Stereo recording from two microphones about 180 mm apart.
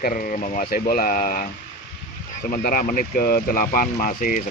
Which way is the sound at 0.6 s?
55° left (ahead or behind).